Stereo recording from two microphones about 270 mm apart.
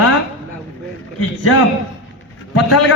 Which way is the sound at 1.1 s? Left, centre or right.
Left.